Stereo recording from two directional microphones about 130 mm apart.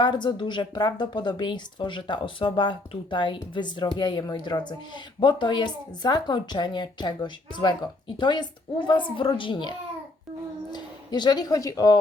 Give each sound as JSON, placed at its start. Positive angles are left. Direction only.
{"t": 0.0, "sound": "a woman's voice", "side_deg": 35}